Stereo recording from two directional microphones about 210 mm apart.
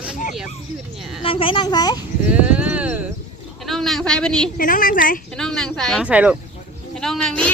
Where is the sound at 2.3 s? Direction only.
5° right (ahead or behind).